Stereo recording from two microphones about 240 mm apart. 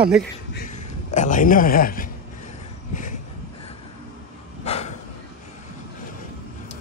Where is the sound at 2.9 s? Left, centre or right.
Left.